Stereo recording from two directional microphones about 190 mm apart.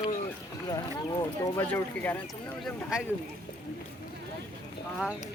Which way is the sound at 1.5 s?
10° left (ahead or behind).